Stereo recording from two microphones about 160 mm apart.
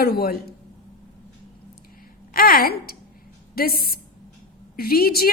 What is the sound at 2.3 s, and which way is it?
A woman's voice, 65° left (ahead or behind).